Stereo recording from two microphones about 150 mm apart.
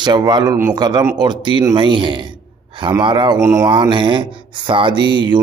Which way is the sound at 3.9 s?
35° right (ahead or behind).